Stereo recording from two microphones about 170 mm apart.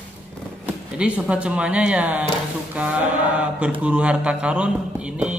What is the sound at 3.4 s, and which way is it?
A man's voice, 5° right (ahead or behind).